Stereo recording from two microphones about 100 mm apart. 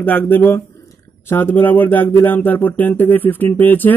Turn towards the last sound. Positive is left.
turn(degrees=20)  # may be behind; listen again after turning